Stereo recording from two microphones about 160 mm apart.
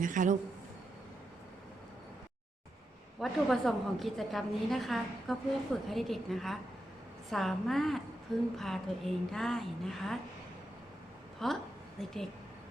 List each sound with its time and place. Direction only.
0.0 s a man's voice: 55° right (ahead or behind)
3.2 s a woman's voice: centre (ahead or behind)
11.4 s a woman's voice: centre (ahead or behind)